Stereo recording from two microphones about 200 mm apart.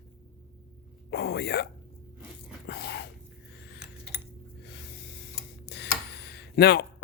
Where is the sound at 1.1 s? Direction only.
55° left (ahead or behind).